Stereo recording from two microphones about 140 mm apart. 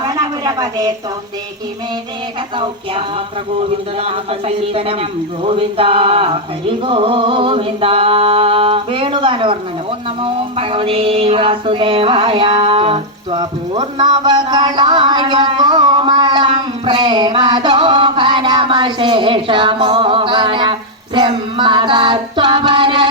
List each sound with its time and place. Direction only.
0.0 s a sound: 25° right (ahead or behind)
4.0 s speech: 45° right (ahead or behind)
5.4 s music: 40° right (ahead or behind)